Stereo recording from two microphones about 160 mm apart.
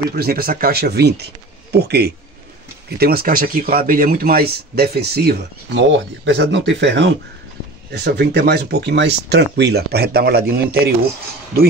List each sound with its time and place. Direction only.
0.1 s a man's voice: 75° right (ahead or behind); by 7.2 s 90° right
7.9 s speech: 80° right